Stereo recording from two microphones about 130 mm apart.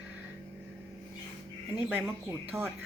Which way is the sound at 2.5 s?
15° right (ahead or behind).